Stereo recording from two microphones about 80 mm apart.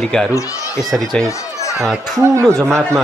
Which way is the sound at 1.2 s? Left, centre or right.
Left.